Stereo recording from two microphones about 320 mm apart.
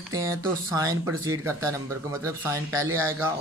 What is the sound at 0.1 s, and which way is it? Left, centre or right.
Speech, centre.